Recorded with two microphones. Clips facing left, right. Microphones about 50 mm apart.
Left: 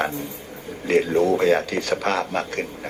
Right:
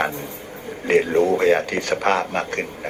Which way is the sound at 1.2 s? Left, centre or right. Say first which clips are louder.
Right 1 dB; right.